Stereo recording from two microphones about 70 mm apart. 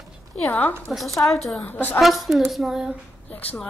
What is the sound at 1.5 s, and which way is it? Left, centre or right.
Speech, left.